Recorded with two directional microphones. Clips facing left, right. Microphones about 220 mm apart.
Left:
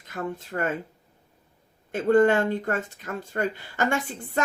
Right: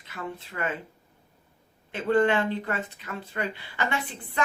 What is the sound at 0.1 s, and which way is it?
Speech, 45° left (ahead or behind).